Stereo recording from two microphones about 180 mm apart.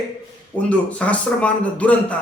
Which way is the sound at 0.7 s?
5° left (ahead or behind).